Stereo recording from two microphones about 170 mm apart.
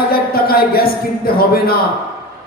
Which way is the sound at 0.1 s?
60° left (ahead or behind).